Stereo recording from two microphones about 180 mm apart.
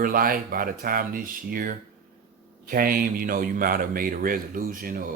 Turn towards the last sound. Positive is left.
turn(degrees=-50)  # may be behind; listen again after turning